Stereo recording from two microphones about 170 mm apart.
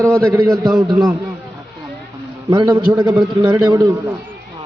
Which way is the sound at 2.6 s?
25° right (ahead or behind).